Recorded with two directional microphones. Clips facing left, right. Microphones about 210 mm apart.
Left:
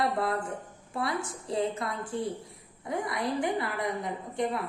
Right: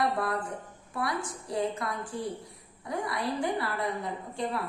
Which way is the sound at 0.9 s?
25° left (ahead or behind).